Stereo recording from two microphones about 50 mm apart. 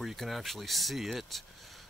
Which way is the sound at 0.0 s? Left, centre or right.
Centre.